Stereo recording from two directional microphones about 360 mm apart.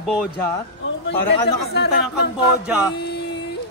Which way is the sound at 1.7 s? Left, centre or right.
Left.